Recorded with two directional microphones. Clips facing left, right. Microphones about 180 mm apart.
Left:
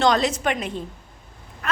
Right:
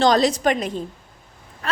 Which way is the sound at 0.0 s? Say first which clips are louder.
Right 3 dB; 35° right (ahead or behind).